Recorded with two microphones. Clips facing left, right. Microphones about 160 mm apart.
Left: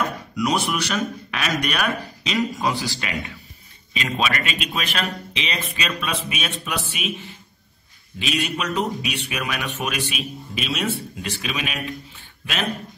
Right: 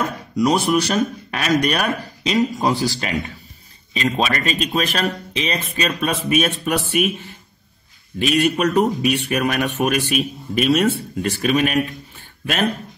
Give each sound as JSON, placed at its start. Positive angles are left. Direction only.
{"t": 0.4, "sound": "speech", "side_deg": -35}